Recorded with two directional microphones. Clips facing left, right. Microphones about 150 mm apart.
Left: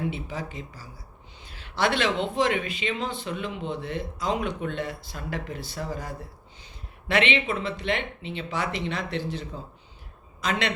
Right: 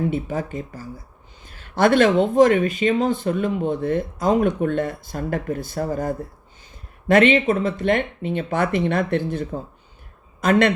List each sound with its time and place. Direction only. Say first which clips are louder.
0.1 s speech: right 9 dB; 50° right (ahead or behind)